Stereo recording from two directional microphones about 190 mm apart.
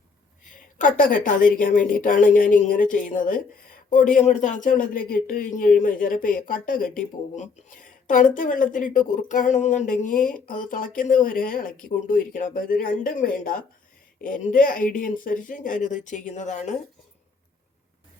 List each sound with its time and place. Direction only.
0.8 s speech: 45° left (ahead or behind)
7.9 s a sound: 45° left (ahead or behind)
8.4 s speech: 45° left (ahead or behind)